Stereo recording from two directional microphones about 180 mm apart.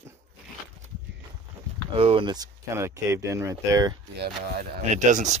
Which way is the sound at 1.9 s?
30° right (ahead or behind).